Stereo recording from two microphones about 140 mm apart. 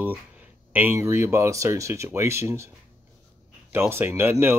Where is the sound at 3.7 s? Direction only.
15° right (ahead or behind).